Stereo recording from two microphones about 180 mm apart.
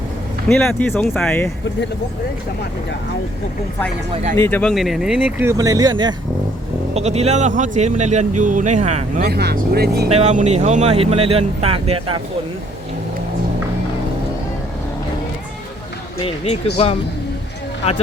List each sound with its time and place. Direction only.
0.4 s speech: 5° left (ahead or behind)
4.1 s speech: 35° right (ahead or behind)
4.4 s speech: 10° left (ahead or behind)
4.7 s speech: centre (ahead or behind); by 6.1 s 25° right (ahead or behind)
6.9 s speech: 35° right (ahead or behind)
9.2 s speech: 60° right (ahead or behind)
10.1 s speech: 35° right (ahead or behind)
16.2 s speech: 35° left (ahead or behind)